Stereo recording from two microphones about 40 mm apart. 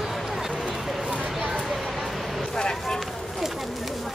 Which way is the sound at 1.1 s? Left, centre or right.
Right.